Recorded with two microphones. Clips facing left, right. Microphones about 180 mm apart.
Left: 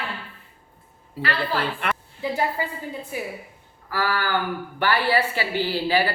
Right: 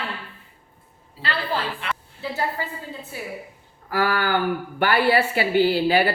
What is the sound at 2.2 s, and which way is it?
A woman's voice, 15° left (ahead or behind).